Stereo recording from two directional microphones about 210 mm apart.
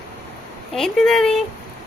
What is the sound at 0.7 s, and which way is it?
Speech, centre (ahead or behind).